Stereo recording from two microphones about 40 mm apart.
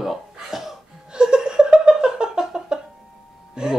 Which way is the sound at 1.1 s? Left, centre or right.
Right.